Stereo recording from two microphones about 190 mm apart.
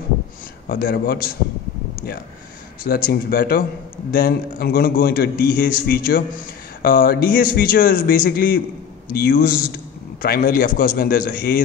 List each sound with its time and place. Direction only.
0.7 s a man's voice: 50° left (ahead or behind)
2.8 s a man's voice: 50° left (ahead or behind)